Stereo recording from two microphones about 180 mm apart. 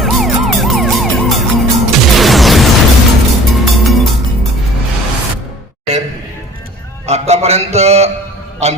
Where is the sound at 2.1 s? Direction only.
Centre (ahead or behind).